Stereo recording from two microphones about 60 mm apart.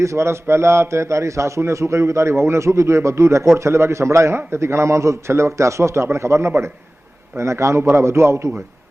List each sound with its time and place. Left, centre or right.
0.0 s a man's voice: right